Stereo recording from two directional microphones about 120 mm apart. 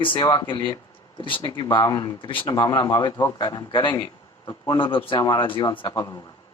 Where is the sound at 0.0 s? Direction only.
40° left (ahead or behind).